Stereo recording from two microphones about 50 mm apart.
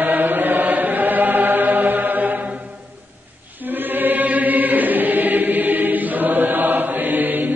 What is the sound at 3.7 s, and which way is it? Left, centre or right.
Choir, right.